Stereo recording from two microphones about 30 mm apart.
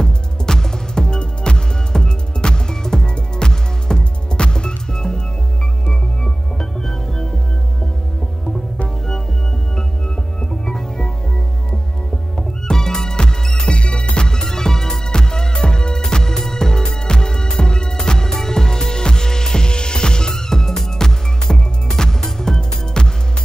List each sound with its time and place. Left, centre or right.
0.0 s music: left
8.8 s music: left
10.6 s music: left
12.4 s music: centre
13.7 s music: left